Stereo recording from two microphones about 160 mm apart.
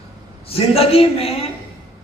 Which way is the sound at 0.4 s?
40° left (ahead or behind).